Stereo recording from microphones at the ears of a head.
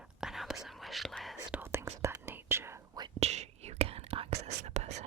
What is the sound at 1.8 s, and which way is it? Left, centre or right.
Whispering, right.